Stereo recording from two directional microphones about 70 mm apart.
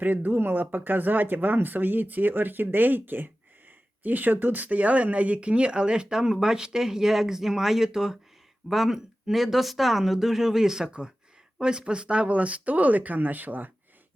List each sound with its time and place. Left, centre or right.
0.0 s speech: right